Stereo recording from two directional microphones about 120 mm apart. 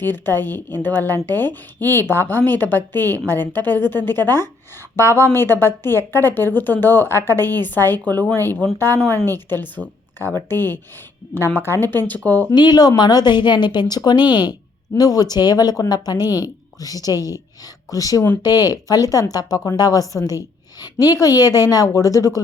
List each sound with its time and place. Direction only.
0.0 s a woman's voice: 15° left (ahead or behind)
1.8 s speech: 30° right (ahead or behind)
2.0 s a woman's voice: 15° left (ahead or behind)
12.5 s a woman's voice: 35° left (ahead or behind)